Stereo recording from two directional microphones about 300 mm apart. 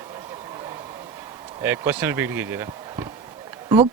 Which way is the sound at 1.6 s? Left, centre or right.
Centre.